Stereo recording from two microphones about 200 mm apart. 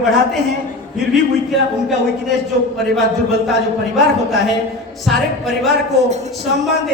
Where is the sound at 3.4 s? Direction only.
Centre (ahead or behind).